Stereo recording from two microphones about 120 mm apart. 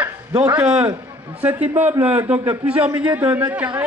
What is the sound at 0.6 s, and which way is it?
A man's voice, 10° right (ahead or behind).